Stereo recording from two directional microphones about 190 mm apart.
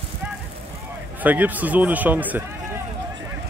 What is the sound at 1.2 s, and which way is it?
Speech, 10° right (ahead or behind).